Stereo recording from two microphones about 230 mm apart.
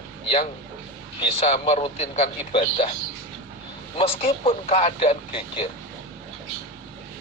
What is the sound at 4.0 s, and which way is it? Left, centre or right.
Speech, left.